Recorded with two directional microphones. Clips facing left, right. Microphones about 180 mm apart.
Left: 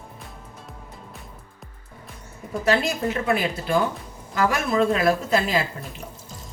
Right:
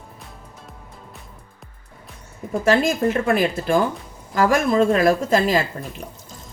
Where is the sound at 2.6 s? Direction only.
45° right (ahead or behind).